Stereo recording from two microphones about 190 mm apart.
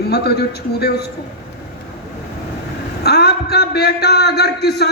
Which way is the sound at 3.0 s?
55° left (ahead or behind).